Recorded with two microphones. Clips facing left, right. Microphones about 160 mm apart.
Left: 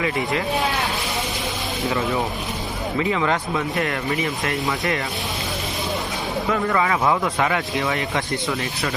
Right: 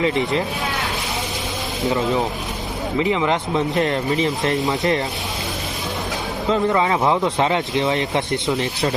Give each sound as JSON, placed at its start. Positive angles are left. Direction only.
{"t": 0.0, "sound": "speech", "side_deg": -20}
{"t": 1.9, "sound": "speech", "side_deg": -20}
{"t": 6.5, "sound": "speech", "side_deg": -25}